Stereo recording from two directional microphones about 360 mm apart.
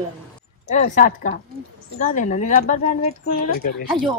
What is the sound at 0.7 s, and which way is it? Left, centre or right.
Speech, left.